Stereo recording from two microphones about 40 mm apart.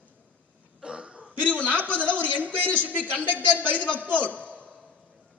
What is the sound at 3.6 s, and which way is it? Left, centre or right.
Speech, left.